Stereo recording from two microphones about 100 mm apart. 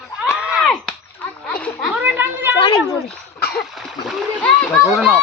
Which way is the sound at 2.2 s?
20° right (ahead or behind).